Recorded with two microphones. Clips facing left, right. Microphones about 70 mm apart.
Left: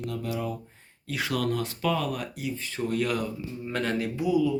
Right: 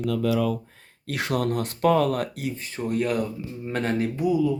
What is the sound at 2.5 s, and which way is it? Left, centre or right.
Speech, right.